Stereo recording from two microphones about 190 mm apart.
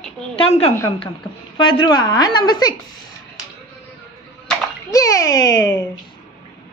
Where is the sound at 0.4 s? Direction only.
30° left (ahead or behind).